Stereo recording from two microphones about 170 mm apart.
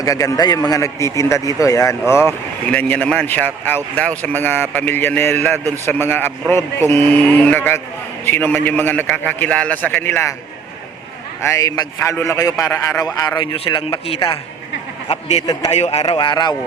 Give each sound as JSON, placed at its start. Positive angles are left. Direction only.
{"t": 0.0, "sound": "a man's voice", "side_deg": 20}
{"t": 11.4, "sound": "a man's voice", "side_deg": 20}
{"t": 16.0, "sound": "a man's voice", "side_deg": 25}